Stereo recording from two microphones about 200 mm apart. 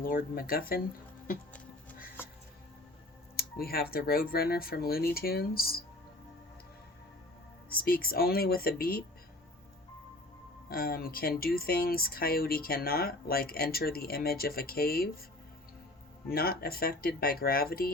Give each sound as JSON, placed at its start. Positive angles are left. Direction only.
{"t": 0.0, "sound": "speech", "side_deg": 45}
{"t": 3.3, "sound": "speech", "side_deg": 50}
{"t": 7.7, "sound": "speech", "side_deg": 45}
{"t": 10.7, "sound": "speech", "side_deg": 50}
{"t": 16.3, "sound": "speech", "side_deg": 50}